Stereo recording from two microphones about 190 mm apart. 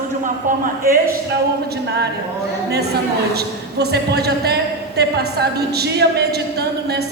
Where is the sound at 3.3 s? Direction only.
60° right (ahead or behind).